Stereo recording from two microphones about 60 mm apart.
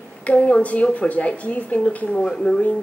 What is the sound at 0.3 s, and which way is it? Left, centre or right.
Speech, left.